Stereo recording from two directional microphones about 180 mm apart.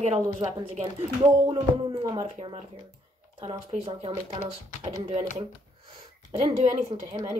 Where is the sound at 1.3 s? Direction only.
20° right (ahead or behind).